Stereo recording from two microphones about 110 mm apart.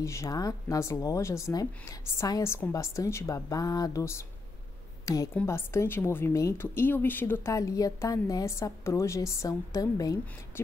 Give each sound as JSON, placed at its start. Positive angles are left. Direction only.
{"t": 0.0, "sound": "a woman's voice", "side_deg": 30}
{"t": 5.3, "sound": "a woman's voice", "side_deg": 20}